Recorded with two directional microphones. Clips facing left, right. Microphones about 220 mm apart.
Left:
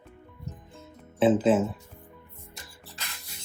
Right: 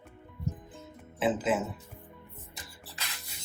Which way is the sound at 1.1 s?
30° left (ahead or behind).